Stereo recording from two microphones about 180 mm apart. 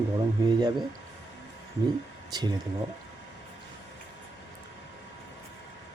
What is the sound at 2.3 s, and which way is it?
Speech, 25° right (ahead or behind).